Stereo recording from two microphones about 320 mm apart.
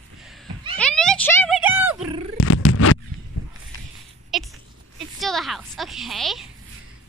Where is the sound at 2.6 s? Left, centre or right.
Left.